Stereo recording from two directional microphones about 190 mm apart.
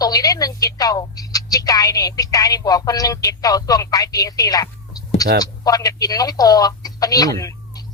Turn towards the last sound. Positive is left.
turn(degrees=20)  # may be behind; listen again after turning